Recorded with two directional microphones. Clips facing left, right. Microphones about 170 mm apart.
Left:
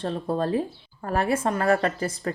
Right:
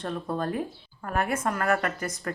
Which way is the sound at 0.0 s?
30° left (ahead or behind).